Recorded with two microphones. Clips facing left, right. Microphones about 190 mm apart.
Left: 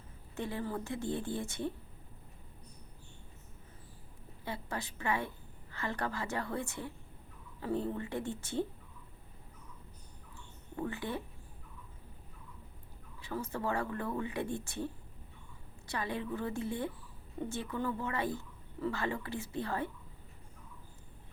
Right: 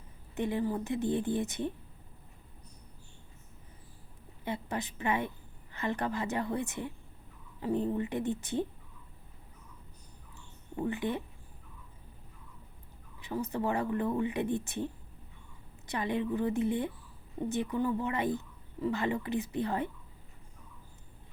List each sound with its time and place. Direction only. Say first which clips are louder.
0.3 s speech: right 6 dB; 20° right (ahead or behind)
4.4 s a woman's voice: right 4 dB; 20° right (ahead or behind)
10.8 s speech: right 5 dB; 20° right (ahead or behind)
13.1 s speech: right 4 dB; 20° right (ahead or behind)
15.9 s speech: right 5 dB; 20° right (ahead or behind)